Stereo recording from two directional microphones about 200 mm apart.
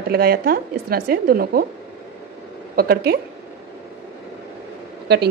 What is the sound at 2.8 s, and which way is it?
Speech, 50° right (ahead or behind).